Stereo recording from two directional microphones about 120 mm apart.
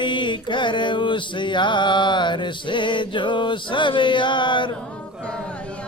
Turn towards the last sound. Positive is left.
turn(degrees=40)  # may be behind; listen again after turning